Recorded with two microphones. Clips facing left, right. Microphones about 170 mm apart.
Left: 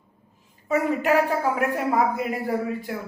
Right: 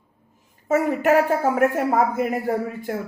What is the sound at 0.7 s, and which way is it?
A woman's voice, 45° right (ahead or behind).